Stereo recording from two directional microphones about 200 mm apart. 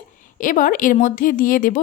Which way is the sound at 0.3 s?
40° left (ahead or behind).